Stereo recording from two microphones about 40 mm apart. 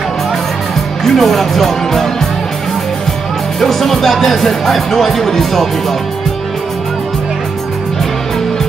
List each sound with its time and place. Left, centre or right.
1.0 s speech: centre
3.6 s speech: centre